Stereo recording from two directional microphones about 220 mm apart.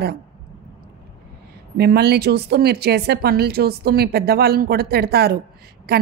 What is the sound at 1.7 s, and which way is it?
A woman's voice, 45° right (ahead or behind).